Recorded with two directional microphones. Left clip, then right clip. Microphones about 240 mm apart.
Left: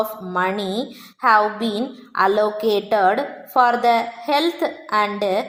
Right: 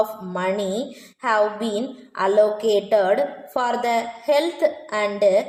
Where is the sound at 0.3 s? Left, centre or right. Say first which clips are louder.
Left 2 dB; centre.